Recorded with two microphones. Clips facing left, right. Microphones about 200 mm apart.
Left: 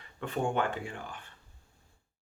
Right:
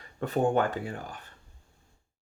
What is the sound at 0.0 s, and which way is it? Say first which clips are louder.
Speech: right 6 dB; 40° right (ahead or behind).